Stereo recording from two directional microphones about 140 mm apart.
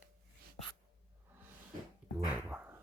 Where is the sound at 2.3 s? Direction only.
10° right (ahead or behind).